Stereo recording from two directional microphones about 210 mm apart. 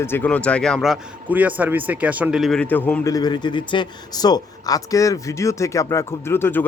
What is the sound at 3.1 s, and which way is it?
Speech, 20° left (ahead or behind).